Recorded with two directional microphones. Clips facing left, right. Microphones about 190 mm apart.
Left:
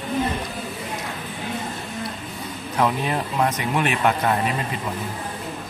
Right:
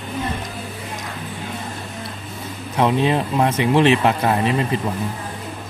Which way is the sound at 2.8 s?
25° right (ahead or behind).